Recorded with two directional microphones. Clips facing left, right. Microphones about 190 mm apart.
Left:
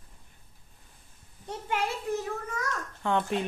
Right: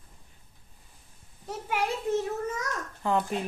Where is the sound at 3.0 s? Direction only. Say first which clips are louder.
Even; centre (ahead or behind).